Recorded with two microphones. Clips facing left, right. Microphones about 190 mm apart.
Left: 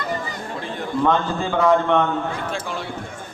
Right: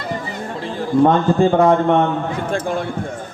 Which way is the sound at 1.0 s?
45° right (ahead or behind).